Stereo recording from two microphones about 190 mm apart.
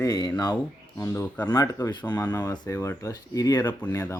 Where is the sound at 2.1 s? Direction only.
10° left (ahead or behind).